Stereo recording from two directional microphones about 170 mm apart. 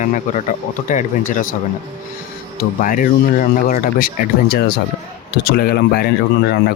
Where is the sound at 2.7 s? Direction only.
50° left (ahead or behind).